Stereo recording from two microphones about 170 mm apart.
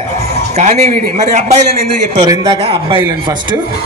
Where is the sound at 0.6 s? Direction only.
45° right (ahead or behind).